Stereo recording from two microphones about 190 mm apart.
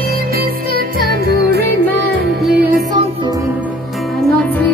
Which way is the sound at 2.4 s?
Centre (ahead or behind).